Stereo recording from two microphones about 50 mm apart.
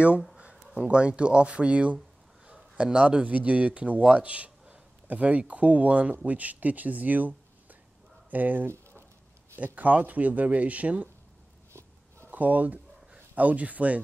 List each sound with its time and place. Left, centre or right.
0.8 s speech: right
9.8 s speech: right
12.3 s speech: right